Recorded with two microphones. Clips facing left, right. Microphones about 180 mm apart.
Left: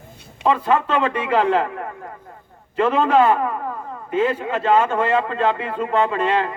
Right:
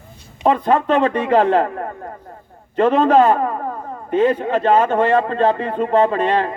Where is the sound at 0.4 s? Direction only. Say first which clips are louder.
Right 3 dB; 40° right (ahead or behind).